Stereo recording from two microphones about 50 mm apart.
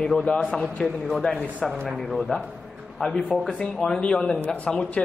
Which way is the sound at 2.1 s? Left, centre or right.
Centre.